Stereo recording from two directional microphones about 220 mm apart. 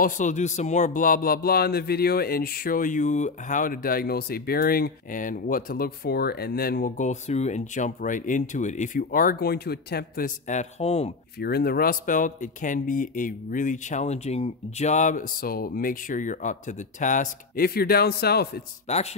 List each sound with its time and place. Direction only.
0.0 s speech: 35° left (ahead or behind)
11.3 s speech: 45° left (ahead or behind)
18.9 s speech: 30° left (ahead or behind)